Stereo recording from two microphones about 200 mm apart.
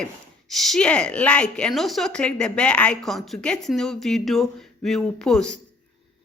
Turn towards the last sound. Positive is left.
turn(degrees=5)  # may be behind; listen again after turning